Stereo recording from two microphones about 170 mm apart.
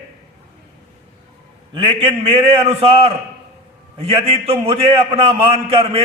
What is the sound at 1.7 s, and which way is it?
A man's voice, 30° right (ahead or behind).